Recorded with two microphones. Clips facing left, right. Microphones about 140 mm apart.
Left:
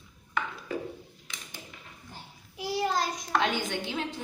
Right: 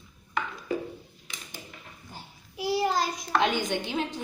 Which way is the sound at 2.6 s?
10° right (ahead or behind).